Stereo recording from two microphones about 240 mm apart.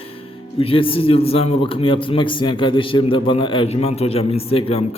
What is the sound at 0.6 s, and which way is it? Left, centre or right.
A man's voice, left.